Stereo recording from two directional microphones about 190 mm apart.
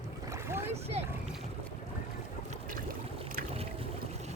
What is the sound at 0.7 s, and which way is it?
Boat, 35° right (ahead or behind).